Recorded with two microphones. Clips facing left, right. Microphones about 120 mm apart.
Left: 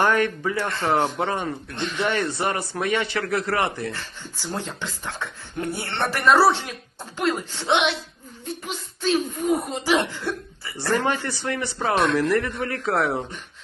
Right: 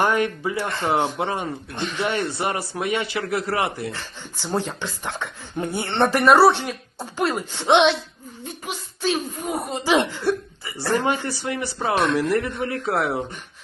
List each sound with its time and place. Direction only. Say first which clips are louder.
0.0 s a man's voice: even; 15° right (ahead or behind)
6.2 s a man's voice: right 2 dB; centre (ahead or behind)
7.2 s a man's voice: right 1 dB; 10° right (ahead or behind)